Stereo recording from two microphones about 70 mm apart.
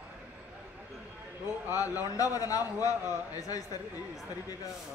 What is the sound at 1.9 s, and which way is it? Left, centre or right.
A man's voice, left.